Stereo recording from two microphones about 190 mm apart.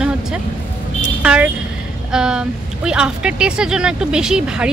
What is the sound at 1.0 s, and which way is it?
Vehicle, 5° right (ahead or behind).